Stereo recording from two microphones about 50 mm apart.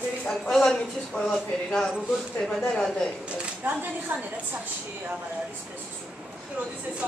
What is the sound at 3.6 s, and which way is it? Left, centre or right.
Speech, right.